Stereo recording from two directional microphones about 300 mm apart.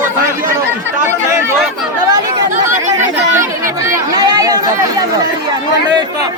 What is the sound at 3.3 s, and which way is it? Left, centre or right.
Chatter, centre.